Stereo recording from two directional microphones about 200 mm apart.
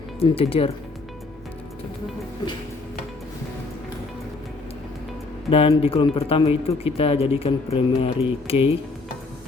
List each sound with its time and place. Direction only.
0.2 s speech: 30° left (ahead or behind)
5.5 s speech: 30° left (ahead or behind)